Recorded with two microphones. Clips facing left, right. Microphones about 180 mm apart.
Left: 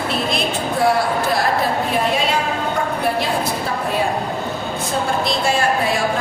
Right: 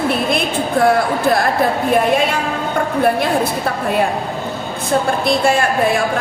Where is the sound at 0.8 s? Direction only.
50° right (ahead or behind).